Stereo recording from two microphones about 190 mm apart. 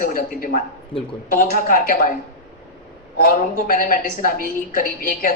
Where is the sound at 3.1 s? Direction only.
50° left (ahead or behind).